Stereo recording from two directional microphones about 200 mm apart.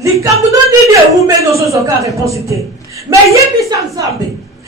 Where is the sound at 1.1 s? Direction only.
15° right (ahead or behind).